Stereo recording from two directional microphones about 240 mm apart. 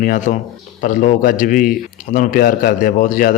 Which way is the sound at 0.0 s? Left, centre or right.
Left.